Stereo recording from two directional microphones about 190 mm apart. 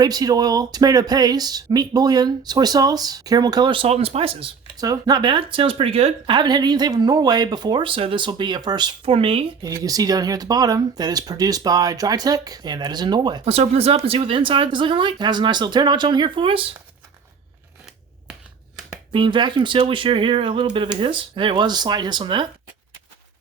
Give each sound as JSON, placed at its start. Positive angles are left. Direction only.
{"t": 0.0, "sound": "speech", "side_deg": -20}
{"t": 9.6, "sound": "speech", "side_deg": -20}
{"t": 19.1, "sound": "speech", "side_deg": -25}